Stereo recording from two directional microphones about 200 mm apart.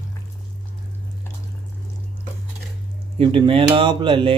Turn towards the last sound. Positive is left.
turn(degrees=-25)  # may be behind; listen again after turning